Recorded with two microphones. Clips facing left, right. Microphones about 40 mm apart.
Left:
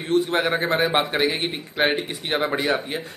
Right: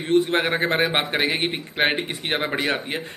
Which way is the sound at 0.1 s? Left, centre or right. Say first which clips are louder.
Right 1 dB; right.